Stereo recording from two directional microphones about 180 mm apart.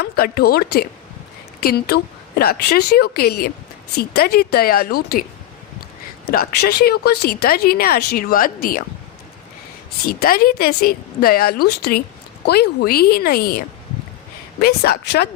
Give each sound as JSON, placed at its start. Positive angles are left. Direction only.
{"t": 0.0, "sound": "speech", "side_deg": 60}
{"t": 6.3, "sound": "speech", "side_deg": 60}
{"t": 10.1, "sound": "speech", "side_deg": 55}
{"t": 14.6, "sound": "speech", "side_deg": 60}